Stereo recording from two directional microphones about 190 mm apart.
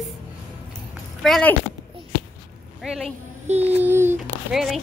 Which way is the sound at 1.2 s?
Centre (ahead or behind).